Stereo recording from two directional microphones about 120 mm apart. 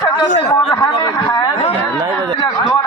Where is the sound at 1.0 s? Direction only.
35° left (ahead or behind).